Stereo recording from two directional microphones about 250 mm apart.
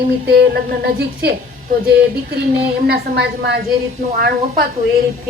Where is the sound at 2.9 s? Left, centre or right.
Right.